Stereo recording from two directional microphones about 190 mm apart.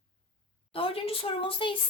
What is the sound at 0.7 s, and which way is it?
A woman's voice, 30° left (ahead or behind).